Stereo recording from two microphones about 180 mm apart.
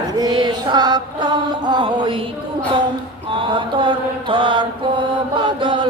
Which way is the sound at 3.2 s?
30° right (ahead or behind).